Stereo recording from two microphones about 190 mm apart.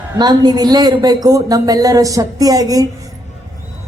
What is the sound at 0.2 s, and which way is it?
Speech, 20° right (ahead or behind).